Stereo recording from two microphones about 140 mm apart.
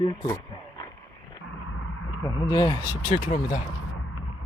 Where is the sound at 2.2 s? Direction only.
25° left (ahead or behind).